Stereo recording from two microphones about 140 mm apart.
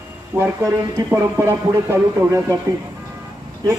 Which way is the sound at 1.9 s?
15° right (ahead or behind).